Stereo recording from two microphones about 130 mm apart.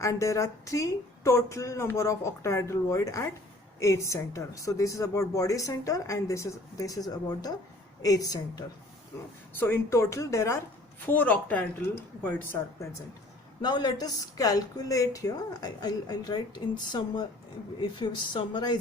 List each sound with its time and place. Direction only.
0.0 s a woman's voice: 25° left (ahead or behind)
9.6 s a woman's voice: 15° left (ahead or behind)
13.6 s a woman's voice: 30° left (ahead or behind)
17.7 s speech: 35° left (ahead or behind)